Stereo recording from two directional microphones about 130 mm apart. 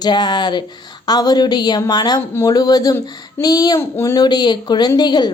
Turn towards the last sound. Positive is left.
turn(degrees=30)  # may be behind; listen again after turning